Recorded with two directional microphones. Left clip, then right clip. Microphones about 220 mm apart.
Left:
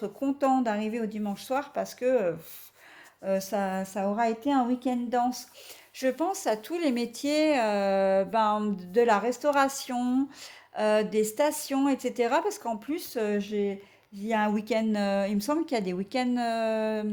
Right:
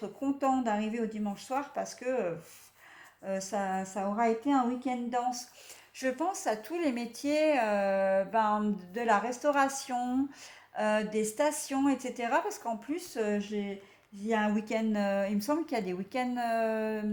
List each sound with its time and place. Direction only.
0.0 s speech: 50° left (ahead or behind)